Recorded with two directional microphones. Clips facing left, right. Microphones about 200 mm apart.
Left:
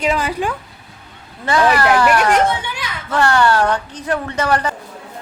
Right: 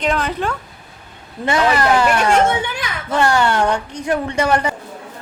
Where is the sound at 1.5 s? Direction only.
20° right (ahead or behind).